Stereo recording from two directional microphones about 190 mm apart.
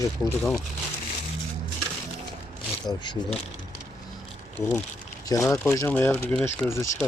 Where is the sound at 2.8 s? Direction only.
25° left (ahead or behind).